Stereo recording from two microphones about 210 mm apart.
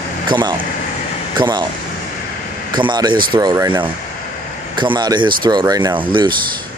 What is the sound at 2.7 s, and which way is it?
Speech, 20° right (ahead or behind).